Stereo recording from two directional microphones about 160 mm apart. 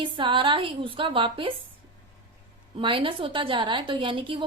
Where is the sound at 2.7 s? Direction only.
35° right (ahead or behind).